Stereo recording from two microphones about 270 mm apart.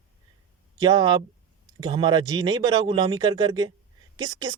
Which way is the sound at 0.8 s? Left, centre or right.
Centre.